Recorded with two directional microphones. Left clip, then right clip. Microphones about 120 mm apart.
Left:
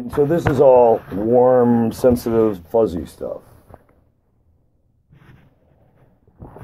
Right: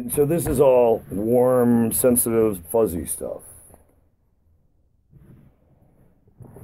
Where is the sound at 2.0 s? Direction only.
20° right (ahead or behind).